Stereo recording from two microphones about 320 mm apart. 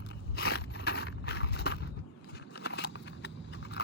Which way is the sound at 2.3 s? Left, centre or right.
Left.